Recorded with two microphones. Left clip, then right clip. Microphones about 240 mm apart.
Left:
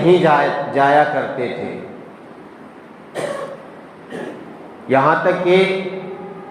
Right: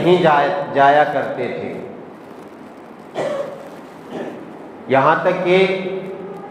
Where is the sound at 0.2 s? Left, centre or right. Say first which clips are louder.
Even; left.